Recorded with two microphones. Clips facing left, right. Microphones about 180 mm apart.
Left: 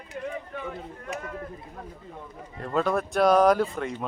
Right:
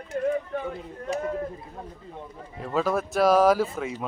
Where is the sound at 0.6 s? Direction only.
30° right (ahead or behind).